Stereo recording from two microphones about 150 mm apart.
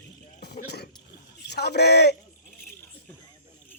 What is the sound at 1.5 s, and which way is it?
Speech, 90° left.